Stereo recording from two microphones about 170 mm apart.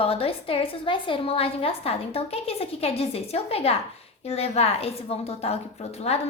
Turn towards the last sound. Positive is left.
turn(degrees=40)  # may be behind; listen again after turning